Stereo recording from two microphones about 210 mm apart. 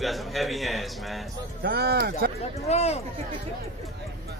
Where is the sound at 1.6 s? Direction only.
50° right (ahead or behind).